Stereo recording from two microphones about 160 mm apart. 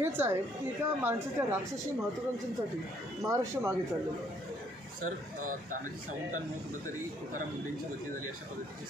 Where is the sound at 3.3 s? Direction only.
15° right (ahead or behind).